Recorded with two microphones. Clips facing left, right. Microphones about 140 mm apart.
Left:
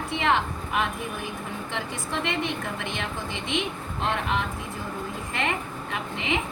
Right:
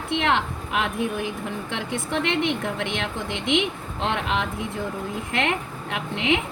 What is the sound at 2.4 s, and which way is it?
A woman's voice, 90° right.